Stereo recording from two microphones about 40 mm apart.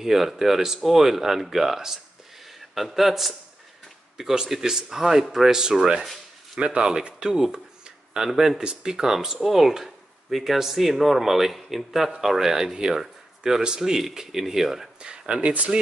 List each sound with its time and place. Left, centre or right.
0.0 s speech: centre
2.4 s a sound: centre
4.2 s speech: centre
6.8 s speech: centre
15.0 s speech: right